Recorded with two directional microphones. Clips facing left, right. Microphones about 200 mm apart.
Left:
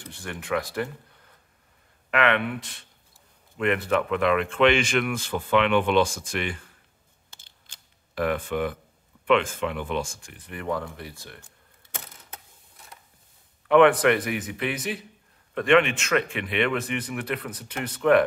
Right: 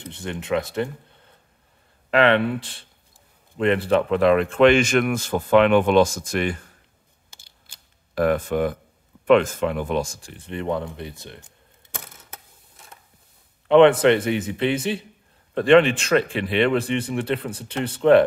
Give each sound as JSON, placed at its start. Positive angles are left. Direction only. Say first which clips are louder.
{"t": 0.0, "sound": "speech", "louder": "right 5 dB", "side_deg": -20}
{"t": 7.2, "sound": "scissors", "louder": "right 1 dB", "side_deg": -10}
{"t": 8.1, "sound": "speech", "louder": "right 5 dB", "side_deg": -40}
{"t": 13.7, "sound": "a man's voice", "louder": "right 4 dB", "side_deg": -25}